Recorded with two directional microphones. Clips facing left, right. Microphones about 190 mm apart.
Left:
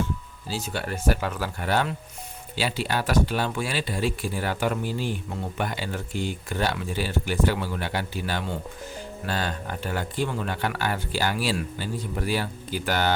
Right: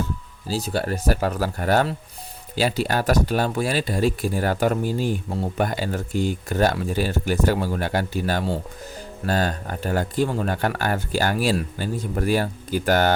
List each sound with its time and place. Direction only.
0.0 s speech: 40° right (ahead or behind)